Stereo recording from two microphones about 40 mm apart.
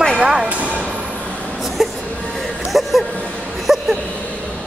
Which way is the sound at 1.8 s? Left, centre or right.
Centre.